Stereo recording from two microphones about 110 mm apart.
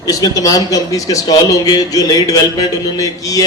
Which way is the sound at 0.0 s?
35° left (ahead or behind).